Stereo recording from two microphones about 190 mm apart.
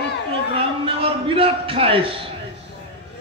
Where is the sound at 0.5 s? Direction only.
30° right (ahead or behind).